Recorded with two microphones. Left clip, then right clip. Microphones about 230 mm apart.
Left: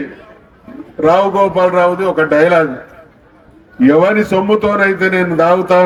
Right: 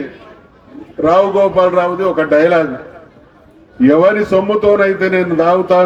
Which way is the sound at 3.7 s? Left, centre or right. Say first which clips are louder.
Even; left.